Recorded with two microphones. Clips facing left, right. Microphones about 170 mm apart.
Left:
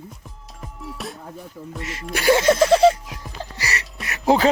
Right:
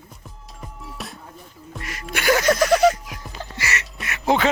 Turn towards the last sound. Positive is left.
turn(degrees=35)  # may be behind; listen again after turning